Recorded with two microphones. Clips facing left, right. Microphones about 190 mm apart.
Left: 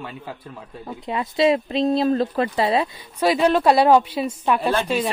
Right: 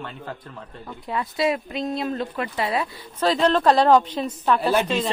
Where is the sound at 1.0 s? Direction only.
20° left (ahead or behind).